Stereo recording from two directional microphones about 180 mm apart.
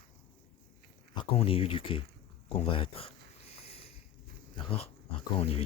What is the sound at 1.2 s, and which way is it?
Speech, 30° left (ahead or behind).